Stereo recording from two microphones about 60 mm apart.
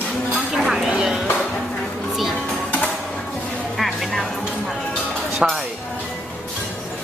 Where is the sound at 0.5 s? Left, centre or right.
Centre.